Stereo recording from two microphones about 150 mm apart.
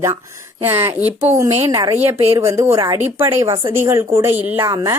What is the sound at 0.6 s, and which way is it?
Speech, 15° right (ahead or behind).